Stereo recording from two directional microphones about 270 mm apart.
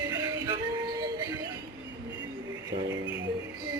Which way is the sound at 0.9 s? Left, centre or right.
Centre.